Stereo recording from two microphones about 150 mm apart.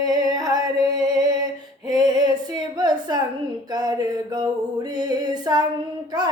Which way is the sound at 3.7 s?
25° right (ahead or behind).